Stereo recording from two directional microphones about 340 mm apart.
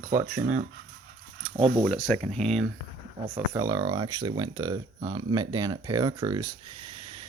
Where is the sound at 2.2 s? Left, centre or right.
Centre.